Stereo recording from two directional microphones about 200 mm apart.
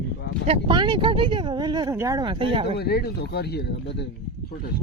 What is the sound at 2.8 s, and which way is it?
Speech, 55° left (ahead or behind).